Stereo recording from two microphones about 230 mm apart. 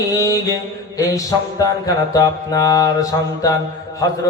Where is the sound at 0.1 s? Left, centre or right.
Centre.